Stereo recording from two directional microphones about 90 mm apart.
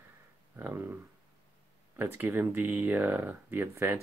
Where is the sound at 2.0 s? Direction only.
25° right (ahead or behind).